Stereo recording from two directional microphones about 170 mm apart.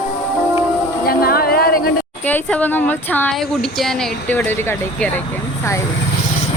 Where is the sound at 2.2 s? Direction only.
10° left (ahead or behind).